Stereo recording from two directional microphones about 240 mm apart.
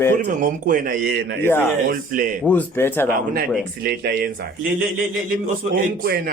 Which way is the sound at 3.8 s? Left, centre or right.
Right.